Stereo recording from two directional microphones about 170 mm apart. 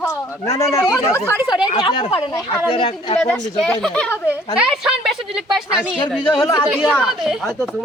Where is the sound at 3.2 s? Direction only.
5° left (ahead or behind).